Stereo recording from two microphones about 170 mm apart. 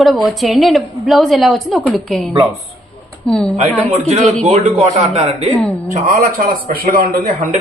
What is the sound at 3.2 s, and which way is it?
Speech, 5° left (ahead or behind).